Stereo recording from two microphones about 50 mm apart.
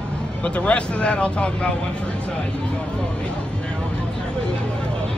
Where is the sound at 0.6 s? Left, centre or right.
Left.